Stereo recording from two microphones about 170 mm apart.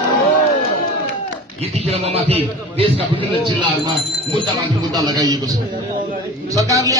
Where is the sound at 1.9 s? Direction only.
35° right (ahead or behind).